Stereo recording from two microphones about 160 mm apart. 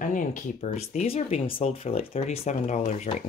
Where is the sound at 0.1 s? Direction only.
55° left (ahead or behind).